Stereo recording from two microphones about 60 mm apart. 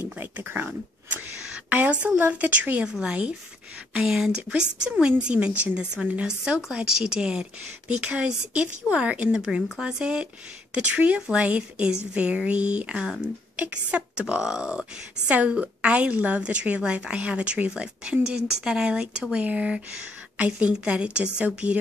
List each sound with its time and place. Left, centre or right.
0.0 s speech: right
1.7 s a woman's voice: right
9.3 s a woman's voice: centre